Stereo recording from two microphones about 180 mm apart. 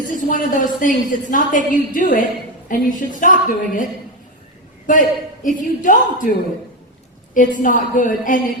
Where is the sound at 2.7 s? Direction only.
45° left (ahead or behind).